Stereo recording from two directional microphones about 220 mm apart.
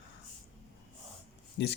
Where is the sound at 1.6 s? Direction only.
50° left (ahead or behind).